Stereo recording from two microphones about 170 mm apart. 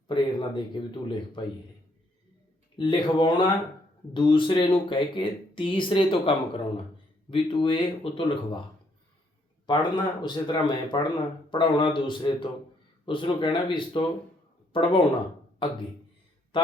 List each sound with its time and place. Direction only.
0.1 s speech: 30° left (ahead or behind)
2.7 s speech: 30° left (ahead or behind)
9.6 s speech: 25° left (ahead or behind)